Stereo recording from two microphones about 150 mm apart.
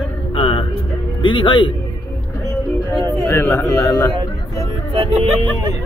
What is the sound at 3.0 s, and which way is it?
Speech, 15° left (ahead or behind).